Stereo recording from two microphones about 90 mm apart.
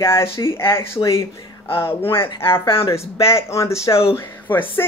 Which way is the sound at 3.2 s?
30° left (ahead or behind).